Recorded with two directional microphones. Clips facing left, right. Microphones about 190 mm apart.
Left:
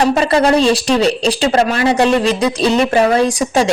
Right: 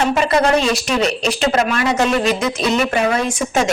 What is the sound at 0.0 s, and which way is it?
Speech, 35° left (ahead or behind).